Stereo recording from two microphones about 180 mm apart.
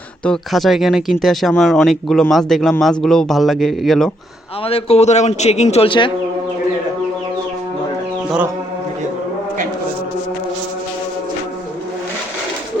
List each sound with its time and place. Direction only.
0.3 s speech: centre (ahead or behind)
4.6 s speech: 35° left (ahead or behind)